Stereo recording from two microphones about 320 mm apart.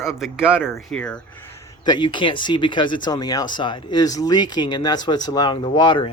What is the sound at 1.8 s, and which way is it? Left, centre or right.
Speech, centre.